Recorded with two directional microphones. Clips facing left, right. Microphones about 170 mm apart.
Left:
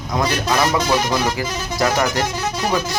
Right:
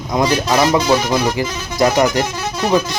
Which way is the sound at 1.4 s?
20° right (ahead or behind).